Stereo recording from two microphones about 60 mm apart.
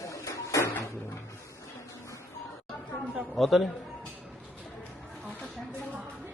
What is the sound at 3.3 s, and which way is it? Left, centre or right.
Speech, centre.